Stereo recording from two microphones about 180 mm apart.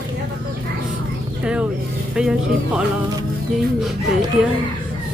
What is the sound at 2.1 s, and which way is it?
Speech, 5° right (ahead or behind).